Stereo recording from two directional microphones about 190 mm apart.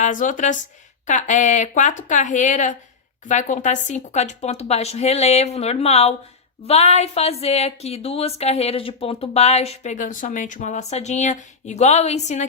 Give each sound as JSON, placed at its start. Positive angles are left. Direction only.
{"t": 0.0, "sound": "a woman's voice", "side_deg": 40}